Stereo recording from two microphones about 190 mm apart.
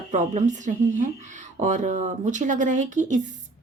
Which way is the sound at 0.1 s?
40° right (ahead or behind).